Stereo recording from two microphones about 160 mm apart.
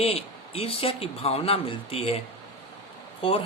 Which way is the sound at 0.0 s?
40° left (ahead or behind).